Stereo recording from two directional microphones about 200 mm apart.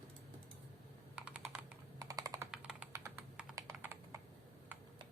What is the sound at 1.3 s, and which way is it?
Computer keyboard, 5° right (ahead or behind).